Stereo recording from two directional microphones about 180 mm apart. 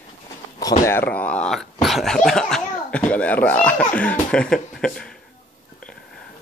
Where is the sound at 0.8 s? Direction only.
10° left (ahead or behind).